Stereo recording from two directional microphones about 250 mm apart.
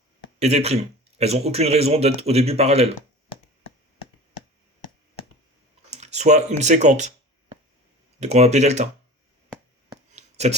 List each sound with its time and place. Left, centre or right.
0.3 s speech: right
5.9 s speech: right
8.2 s speech: right
10.2 s a sound: right